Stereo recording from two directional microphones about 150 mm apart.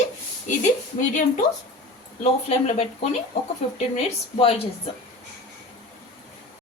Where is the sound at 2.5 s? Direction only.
45° left (ahead or behind).